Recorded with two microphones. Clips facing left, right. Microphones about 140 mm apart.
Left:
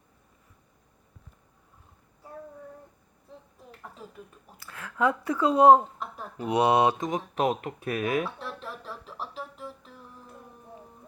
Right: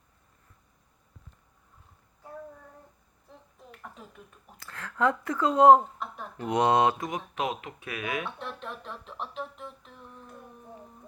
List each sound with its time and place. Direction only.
4.6 s speech: 15° left (ahead or behind)
7.3 s speech: 40° left (ahead or behind)
8.4 s music: centre (ahead or behind)